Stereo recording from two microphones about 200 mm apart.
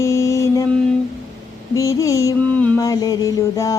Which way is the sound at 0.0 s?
15° left (ahead or behind).